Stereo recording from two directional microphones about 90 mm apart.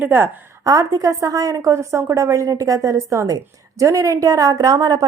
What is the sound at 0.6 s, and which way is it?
A woman's voice, 40° right (ahead or behind).